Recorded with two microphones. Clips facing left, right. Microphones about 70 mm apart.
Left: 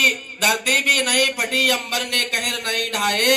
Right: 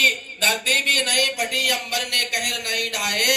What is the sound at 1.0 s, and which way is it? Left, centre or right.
A man's voice, left.